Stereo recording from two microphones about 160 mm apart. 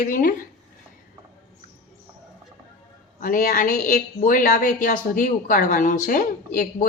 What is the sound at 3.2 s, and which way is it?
A woman's voice, 60° left (ahead or behind).